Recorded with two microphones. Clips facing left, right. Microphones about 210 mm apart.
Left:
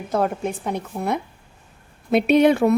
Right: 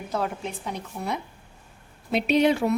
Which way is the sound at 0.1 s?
50° left (ahead or behind).